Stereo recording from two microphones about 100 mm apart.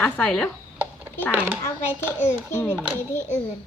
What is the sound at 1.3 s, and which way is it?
Speech, 15° right (ahead or behind).